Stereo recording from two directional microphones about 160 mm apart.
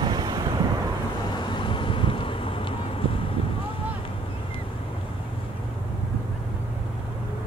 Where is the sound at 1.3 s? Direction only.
30° left (ahead or behind).